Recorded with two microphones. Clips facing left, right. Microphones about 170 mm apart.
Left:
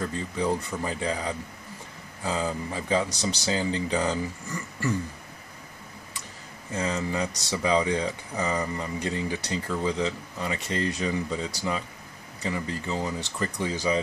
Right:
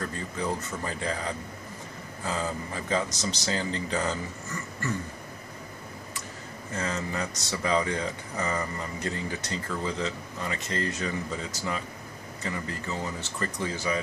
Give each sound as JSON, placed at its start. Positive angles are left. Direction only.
{"t": 0.0, "sound": "speech", "side_deg": 15}
{"t": 6.7, "sound": "speech", "side_deg": 15}
{"t": 12.4, "sound": "speech", "side_deg": 20}